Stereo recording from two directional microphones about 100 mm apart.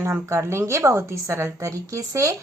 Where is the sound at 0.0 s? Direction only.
25° right (ahead or behind).